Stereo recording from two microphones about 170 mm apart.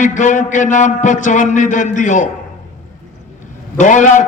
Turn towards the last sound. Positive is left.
turn(degrees=45)  # may be behind; listen again after turning